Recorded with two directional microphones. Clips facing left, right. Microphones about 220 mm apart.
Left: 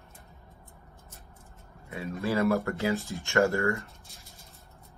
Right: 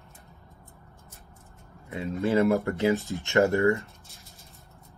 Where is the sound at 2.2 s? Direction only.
15° right (ahead or behind).